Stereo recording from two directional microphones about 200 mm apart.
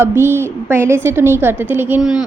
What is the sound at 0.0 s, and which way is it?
A woman's voice, 10° right (ahead or behind).